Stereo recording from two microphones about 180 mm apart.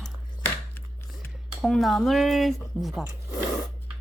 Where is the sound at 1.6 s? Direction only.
Centre (ahead or behind).